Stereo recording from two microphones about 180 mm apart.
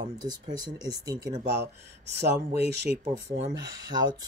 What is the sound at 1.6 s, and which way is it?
Speech, 70° right (ahead or behind).